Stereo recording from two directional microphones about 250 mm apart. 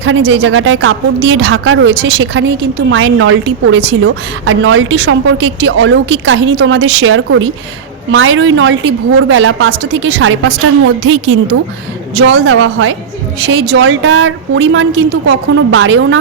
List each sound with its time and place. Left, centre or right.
0.0 s a woman's voice: right